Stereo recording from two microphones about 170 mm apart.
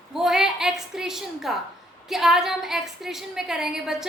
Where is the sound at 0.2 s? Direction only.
Centre (ahead or behind).